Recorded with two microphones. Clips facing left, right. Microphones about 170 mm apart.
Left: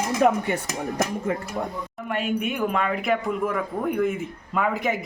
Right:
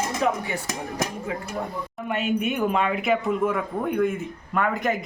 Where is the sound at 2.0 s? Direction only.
Centre (ahead or behind).